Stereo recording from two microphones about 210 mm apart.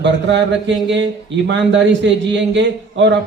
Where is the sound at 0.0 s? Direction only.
55° right (ahead or behind).